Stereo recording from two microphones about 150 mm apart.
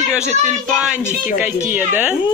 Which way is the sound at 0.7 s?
5° right (ahead or behind).